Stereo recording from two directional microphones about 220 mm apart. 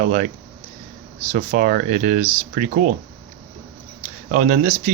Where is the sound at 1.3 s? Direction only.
35° right (ahead or behind).